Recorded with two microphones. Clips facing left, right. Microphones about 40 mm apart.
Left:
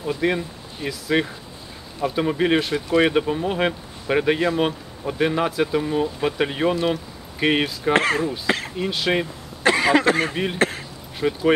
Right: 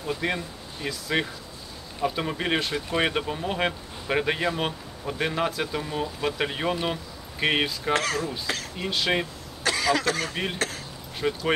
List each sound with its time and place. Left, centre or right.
0.0 s speech: centre
7.9 s speech: left
8.7 s speech: centre
9.6 s speech: left
10.3 s speech: centre